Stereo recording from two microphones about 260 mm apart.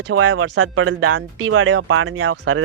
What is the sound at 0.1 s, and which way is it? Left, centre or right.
Speech, right.